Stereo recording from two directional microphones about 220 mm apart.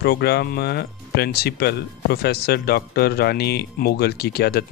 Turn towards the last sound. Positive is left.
turn(degrees=45)  # may be behind; listen again after turning